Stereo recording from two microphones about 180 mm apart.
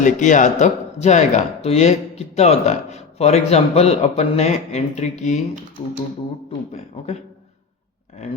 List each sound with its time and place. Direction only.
0.0 s speech: 45° left (ahead or behind)
6.7 s speech: 35° left (ahead or behind)